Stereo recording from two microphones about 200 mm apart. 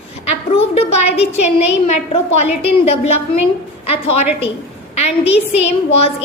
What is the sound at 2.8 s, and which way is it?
A woman's voice, 30° left (ahead or behind).